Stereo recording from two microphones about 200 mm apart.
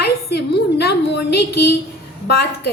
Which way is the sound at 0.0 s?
55° left (ahead or behind).